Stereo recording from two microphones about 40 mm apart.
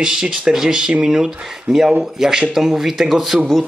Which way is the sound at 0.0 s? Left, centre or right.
Centre.